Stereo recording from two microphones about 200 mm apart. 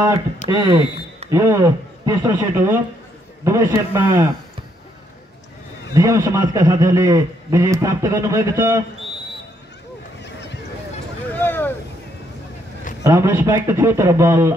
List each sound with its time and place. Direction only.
0.5 s a man's voice: 20° right (ahead or behind)
5.9 s a man's voice: 15° right (ahead or behind)
10.2 s goose: 60° left (ahead or behind)
11.3 s vehicle: 10° left (ahead or behind)
13.0 s a man's voice: 15° right (ahead or behind)